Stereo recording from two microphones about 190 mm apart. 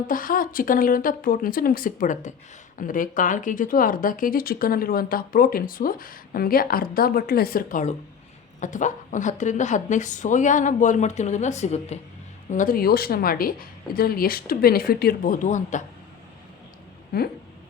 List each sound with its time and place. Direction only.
0.1 s a woman's voice: 45° left (ahead or behind)
17.1 s speech: 55° left (ahead or behind)